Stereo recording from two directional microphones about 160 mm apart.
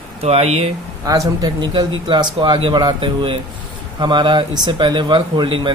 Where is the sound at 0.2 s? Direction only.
40° right (ahead or behind).